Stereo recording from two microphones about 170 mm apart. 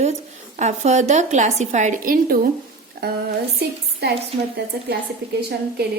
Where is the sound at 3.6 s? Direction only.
70° right (ahead or behind).